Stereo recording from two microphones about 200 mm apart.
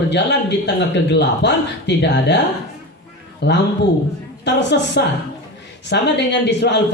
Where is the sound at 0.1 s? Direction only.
60° left (ahead or behind).